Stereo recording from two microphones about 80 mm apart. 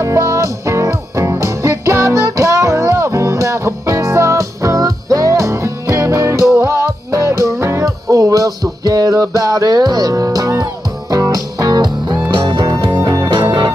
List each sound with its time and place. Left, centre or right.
0.0 s music: right
12.4 s music: right